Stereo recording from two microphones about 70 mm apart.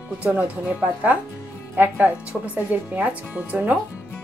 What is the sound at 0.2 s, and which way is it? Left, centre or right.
A woman's voice, right.